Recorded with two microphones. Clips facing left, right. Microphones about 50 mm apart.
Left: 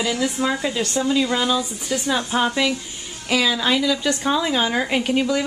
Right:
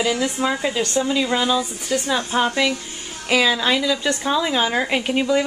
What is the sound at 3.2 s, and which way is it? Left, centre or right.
Speech, centre.